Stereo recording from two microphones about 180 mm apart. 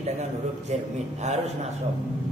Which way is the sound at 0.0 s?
40° right (ahead or behind).